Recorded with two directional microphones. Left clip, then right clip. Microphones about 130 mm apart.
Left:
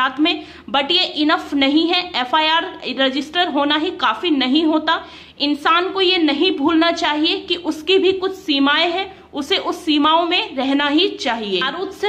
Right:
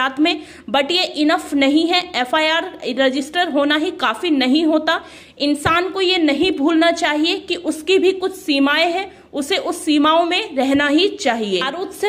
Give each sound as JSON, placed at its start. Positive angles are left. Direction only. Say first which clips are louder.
{"t": 0.0, "sound": "a woman's voice", "louder": "even", "side_deg": -50}